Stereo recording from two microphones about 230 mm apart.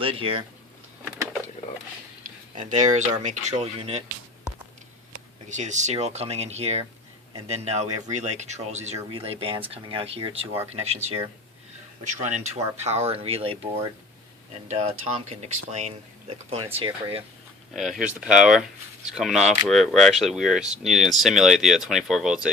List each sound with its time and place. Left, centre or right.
0.0 s speech: right
2.6 s speech: right
5.5 s speech: right
14.7 s speech: right
17.7 s speech: centre